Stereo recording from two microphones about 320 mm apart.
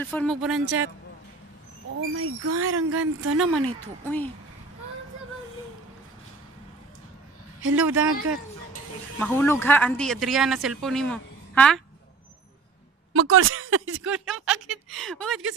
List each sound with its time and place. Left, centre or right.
0.0 s speech: centre
2.0 s speech: right
3.3 s speech: centre
7.7 s speech: centre
9.2 s speech: centre
13.1 s speech: right
14.0 s speech: centre